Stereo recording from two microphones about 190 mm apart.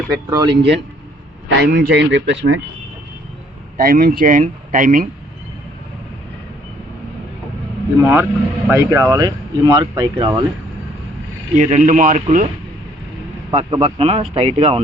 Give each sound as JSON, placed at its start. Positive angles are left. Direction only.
{"t": 0.1, "sound": "speech", "side_deg": -20}
{"t": 0.5, "sound": "speech", "side_deg": -65}
{"t": 3.8, "sound": "speech", "side_deg": -45}
{"t": 8.0, "sound": "speech", "side_deg": -10}
{"t": 11.5, "sound": "speech", "side_deg": -40}
{"t": 13.6, "sound": "speech", "side_deg": -30}